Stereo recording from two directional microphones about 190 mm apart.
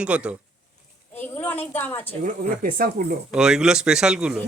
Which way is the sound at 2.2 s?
50° right (ahead or behind).